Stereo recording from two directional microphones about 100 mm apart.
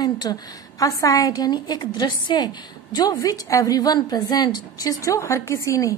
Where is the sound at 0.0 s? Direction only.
40° left (ahead or behind).